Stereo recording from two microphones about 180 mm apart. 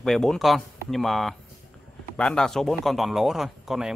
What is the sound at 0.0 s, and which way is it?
A man's voice, centre (ahead or behind).